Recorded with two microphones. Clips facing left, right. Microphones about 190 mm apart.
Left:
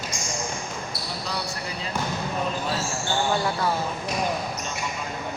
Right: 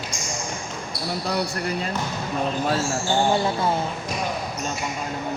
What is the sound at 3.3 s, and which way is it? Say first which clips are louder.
Speech: right 3 dB; 25° right (ahead or behind).